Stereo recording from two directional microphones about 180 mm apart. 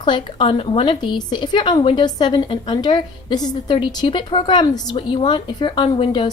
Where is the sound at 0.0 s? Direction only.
25° left (ahead or behind).